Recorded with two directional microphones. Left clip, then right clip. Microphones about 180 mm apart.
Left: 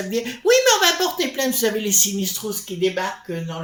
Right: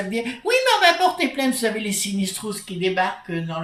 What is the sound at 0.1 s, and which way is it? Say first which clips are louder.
Speech: left 5 dB; 45° left (ahead or behind).